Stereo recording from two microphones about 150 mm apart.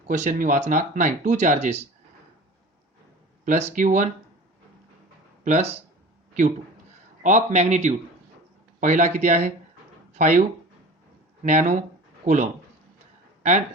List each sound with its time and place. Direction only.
0.1 s speech: 55° right (ahead or behind)
3.4 s speech: 55° right (ahead or behind)
5.5 s a man's voice: 50° right (ahead or behind)
7.2 s a man's voice: 55° right (ahead or behind)
11.4 s a man's voice: 55° right (ahead or behind)